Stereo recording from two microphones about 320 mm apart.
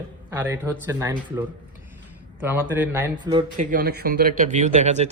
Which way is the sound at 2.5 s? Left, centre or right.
Centre.